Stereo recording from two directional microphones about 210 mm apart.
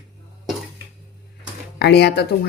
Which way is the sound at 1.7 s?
50° left (ahead or behind).